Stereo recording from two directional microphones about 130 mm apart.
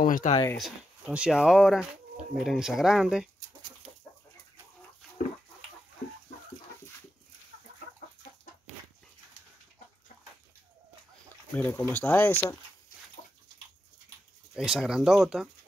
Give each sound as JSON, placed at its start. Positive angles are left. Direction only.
{"t": 0.0, "sound": "speech", "side_deg": 90}
{"t": 0.6, "sound": "speech", "side_deg": -5}
{"t": 11.5, "sound": "speech", "side_deg": 15}
{"t": 14.5, "sound": "speech", "side_deg": -5}